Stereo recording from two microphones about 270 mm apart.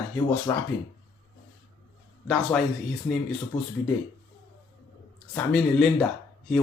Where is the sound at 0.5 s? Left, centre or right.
Centre.